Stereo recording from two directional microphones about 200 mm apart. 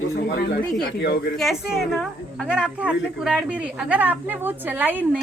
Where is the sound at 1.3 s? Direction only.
Centre (ahead or behind).